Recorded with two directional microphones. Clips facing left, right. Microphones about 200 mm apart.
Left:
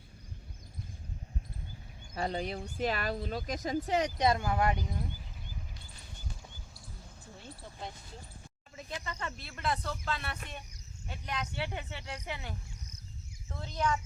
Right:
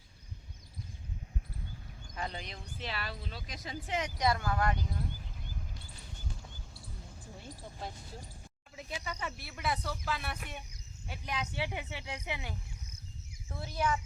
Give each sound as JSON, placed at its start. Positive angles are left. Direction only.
{"t": 2.1, "sound": "speech", "side_deg": 40}
{"t": 4.3, "sound": "speech", "side_deg": 20}
{"t": 8.7, "sound": "speech", "side_deg": -5}